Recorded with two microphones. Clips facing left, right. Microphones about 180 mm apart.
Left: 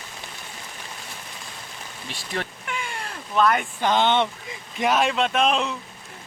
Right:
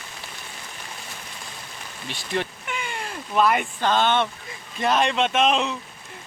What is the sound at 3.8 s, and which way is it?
Speech, 15° left (ahead or behind).